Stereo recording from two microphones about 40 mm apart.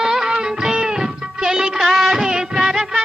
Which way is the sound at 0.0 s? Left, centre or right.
Centre.